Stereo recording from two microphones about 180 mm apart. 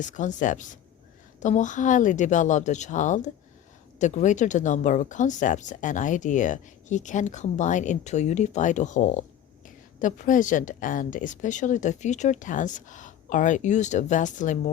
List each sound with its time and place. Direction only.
0.0 s speech: 45° left (ahead or behind)